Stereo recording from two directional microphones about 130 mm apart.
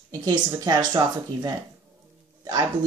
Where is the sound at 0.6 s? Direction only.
35° right (ahead or behind).